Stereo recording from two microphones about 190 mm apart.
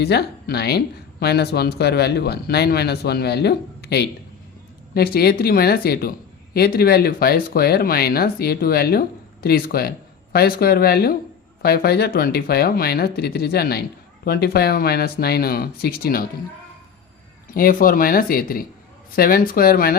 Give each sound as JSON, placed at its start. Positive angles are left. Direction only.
{"t": 0.0, "sound": "speech", "side_deg": 60}
{"t": 17.5, "sound": "speech", "side_deg": 50}